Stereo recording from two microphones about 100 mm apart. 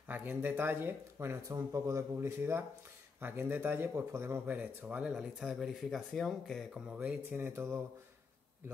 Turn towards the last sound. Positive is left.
turn(degrees=-25)  # may be behind; listen again after turning